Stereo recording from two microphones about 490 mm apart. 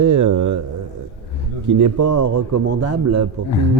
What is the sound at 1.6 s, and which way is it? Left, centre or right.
A man's voice, right.